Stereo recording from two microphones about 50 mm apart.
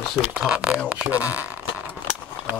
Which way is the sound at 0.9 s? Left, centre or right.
Right.